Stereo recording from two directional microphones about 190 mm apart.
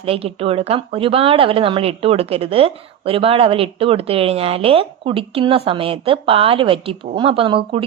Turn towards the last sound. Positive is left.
turn(degrees=-30)  # may be behind; listen again after turning